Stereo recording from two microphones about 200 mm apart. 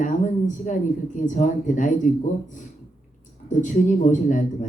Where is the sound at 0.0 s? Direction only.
40° left (ahead or behind).